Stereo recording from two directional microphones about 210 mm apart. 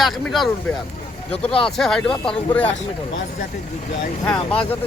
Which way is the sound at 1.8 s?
5° left (ahead or behind).